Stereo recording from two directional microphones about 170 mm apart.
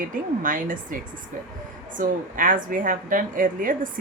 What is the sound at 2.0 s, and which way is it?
A woman's voice, 55° right (ahead or behind).